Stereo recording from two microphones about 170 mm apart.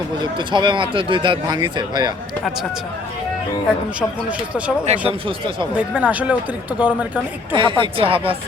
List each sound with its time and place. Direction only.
0.2 s speech: 25° right (ahead or behind)
4.3 s speech: 5° right (ahead or behind)
4.9 s speech: 35° right (ahead or behind)
5.7 s speech: 5° right (ahead or behind)
7.5 s speech: 30° right (ahead or behind)